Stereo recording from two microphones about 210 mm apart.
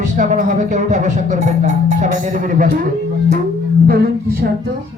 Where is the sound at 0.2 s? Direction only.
35° right (ahead or behind).